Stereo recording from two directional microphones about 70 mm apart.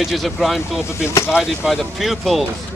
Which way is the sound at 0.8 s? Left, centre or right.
Left.